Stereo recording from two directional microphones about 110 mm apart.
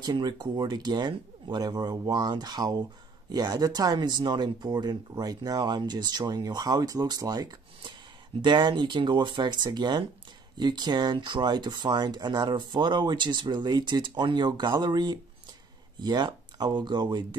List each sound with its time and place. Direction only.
0.0 s speech: 45° right (ahead or behind)
8.4 s speech: 45° right (ahead or behind)